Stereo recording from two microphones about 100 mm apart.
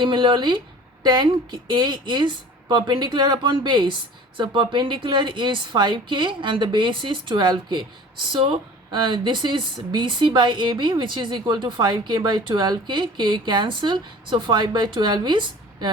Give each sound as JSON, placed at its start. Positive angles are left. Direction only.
{"t": 0.0, "sound": "speech", "side_deg": -50}